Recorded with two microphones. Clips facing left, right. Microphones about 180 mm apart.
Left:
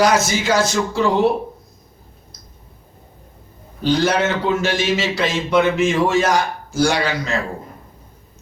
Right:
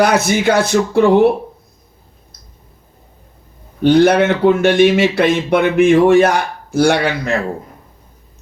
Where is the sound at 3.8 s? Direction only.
60° right (ahead or behind).